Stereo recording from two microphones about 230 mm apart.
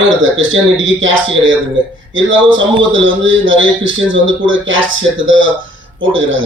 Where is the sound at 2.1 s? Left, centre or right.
Right.